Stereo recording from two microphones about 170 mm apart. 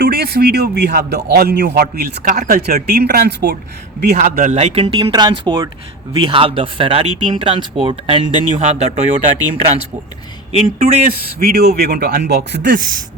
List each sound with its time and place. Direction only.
0.0 s a man's voice: 70° right (ahead or behind)
4.2 s speech: 50° right (ahead or behind)
10.8 s a man's voice: 55° right (ahead or behind); by 12.7 s 85° right